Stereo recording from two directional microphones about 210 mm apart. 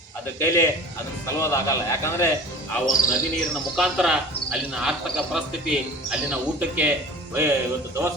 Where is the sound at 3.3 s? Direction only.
Centre (ahead or behind).